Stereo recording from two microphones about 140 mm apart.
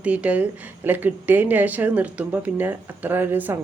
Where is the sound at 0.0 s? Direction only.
10° right (ahead or behind).